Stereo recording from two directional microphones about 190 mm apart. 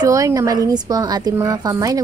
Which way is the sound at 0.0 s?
20° right (ahead or behind).